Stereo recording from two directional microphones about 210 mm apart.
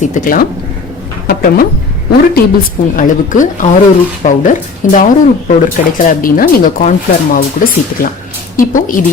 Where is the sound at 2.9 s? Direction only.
40° left (ahead or behind).